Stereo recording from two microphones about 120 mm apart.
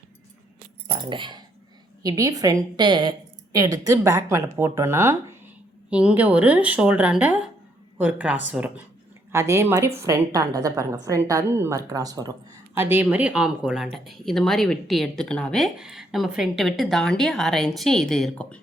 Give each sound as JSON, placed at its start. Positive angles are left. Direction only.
{"t": 0.9, "sound": "a woman's voice", "side_deg": -40}
{"t": 2.8, "sound": "a woman's voice", "side_deg": -40}
{"t": 5.9, "sound": "a woman's voice", "side_deg": -10}
{"t": 9.3, "sound": "a woman's voice", "side_deg": -25}
{"t": 12.7, "sound": "speech", "side_deg": -15}